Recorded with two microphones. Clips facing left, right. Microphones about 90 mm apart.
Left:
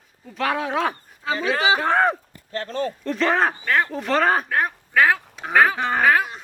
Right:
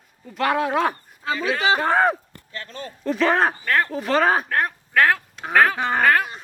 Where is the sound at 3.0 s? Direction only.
5° right (ahead or behind).